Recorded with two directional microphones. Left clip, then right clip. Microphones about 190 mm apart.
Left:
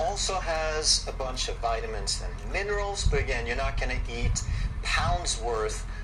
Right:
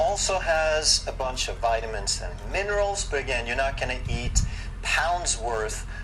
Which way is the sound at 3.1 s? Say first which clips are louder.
Right 3 dB; 30° right (ahead or behind).